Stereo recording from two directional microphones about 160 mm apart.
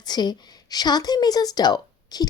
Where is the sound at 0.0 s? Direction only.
25° left (ahead or behind).